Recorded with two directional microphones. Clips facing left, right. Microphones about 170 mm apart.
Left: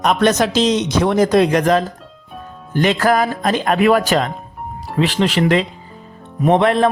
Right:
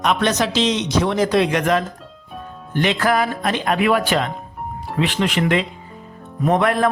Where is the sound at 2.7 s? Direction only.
40° left (ahead or behind).